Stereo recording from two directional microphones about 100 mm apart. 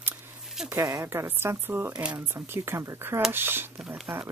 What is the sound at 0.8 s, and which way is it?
Speech, 45° right (ahead or behind).